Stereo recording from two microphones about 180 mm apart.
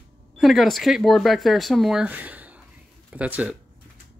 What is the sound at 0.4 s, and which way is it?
Speech, centre (ahead or behind).